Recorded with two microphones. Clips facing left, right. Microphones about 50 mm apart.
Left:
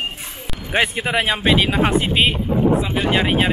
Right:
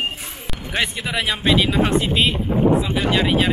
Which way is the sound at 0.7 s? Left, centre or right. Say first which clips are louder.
Left 4 dB; left.